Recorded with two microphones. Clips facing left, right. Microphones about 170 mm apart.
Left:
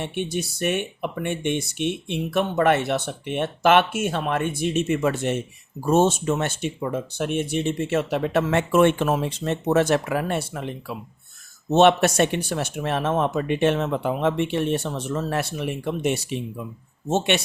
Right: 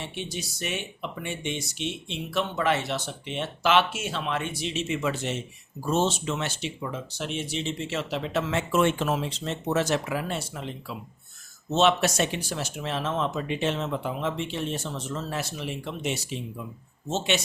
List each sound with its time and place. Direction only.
0.0 s speech: 55° left (ahead or behind)